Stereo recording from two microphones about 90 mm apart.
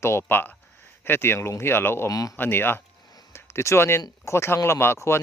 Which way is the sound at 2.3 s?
20° left (ahead or behind).